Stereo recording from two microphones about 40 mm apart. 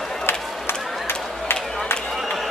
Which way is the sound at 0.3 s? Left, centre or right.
Left.